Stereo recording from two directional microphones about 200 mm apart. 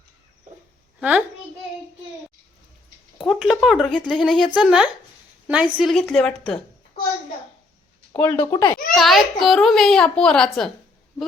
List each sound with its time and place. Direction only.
0.9 s a woman's voice: 5° right (ahead or behind)
3.2 s a child's voice: centre (ahead or behind)
8.1 s a child's voice: 10° left (ahead or behind)
9.0 s a child's voice: centre (ahead or behind)